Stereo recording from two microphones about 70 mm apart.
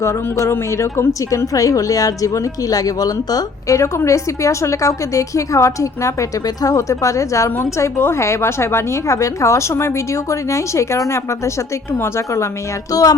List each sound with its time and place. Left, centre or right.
0.0 s a woman's voice: left
3.8 s a woman's voice: left
12.9 s speech: left